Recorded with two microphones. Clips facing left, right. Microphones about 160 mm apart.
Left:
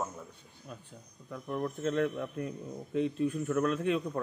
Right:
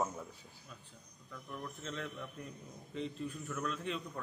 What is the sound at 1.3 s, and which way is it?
A man's voice, 55° left (ahead or behind).